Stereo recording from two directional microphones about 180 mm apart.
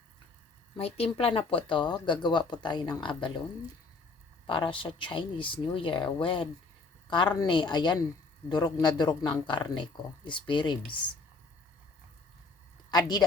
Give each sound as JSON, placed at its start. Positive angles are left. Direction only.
{"t": 0.8, "sound": "speech", "side_deg": 35}
{"t": 4.4, "sound": "speech", "side_deg": 30}
{"t": 12.9, "sound": "speech", "side_deg": 20}